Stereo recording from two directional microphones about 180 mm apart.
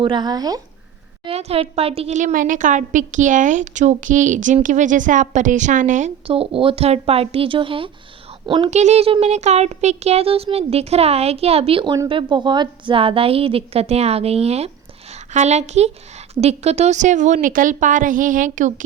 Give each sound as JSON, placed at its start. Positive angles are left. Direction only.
{"t": 0.0, "sound": "speech", "side_deg": -25}
{"t": 1.2, "sound": "a woman's voice", "side_deg": -35}
{"t": 6.2, "sound": "speech", "side_deg": -30}
{"t": 8.7, "sound": "a woman's voice", "side_deg": -40}